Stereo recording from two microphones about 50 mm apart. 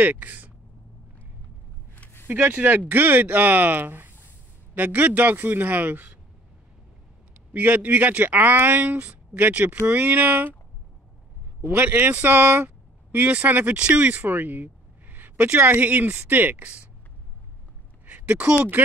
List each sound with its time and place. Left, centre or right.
0.0 s a man's voice: right
2.2 s a man's voice: right
7.5 s a man's voice: right
8.9 s a man's voice: right
11.7 s speech: right
13.7 s speech: right
14.2 s a man's voice: right
18.0 s a sound: right
18.5 s a man's voice: right